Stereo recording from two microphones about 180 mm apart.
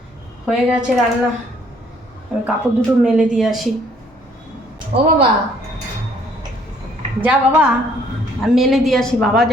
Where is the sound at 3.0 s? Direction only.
5° right (ahead or behind).